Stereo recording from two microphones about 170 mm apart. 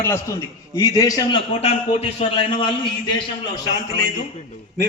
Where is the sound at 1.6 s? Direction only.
35° left (ahead or behind).